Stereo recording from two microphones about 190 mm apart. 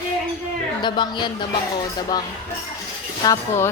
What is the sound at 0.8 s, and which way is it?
Speech, 25° left (ahead or behind).